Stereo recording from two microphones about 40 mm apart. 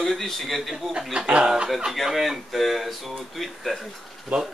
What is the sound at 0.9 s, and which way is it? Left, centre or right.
Speech, right.